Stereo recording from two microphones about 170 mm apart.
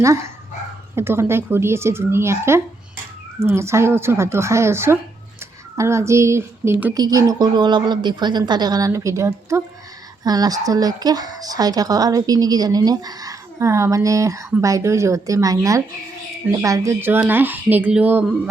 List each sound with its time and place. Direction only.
0.0 s speech: 15° right (ahead or behind)